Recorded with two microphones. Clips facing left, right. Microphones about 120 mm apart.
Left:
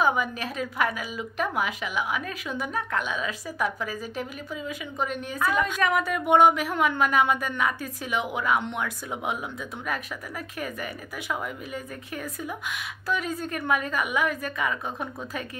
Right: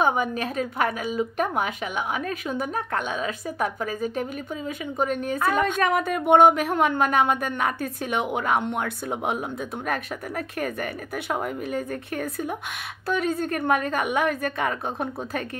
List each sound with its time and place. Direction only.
0.0 s a woman's voice: 50° right (ahead or behind)